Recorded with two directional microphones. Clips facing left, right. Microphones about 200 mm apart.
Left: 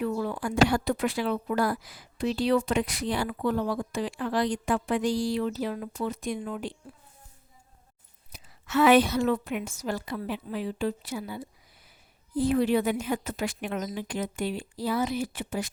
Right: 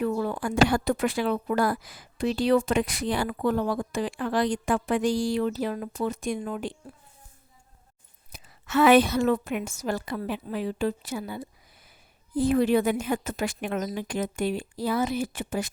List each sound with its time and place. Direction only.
0.0 s speech: 50° right (ahead or behind)
8.3 s speech: 50° right (ahead or behind)